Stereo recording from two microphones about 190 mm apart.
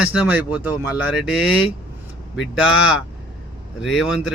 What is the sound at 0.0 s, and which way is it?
Speech, 5° right (ahead or behind).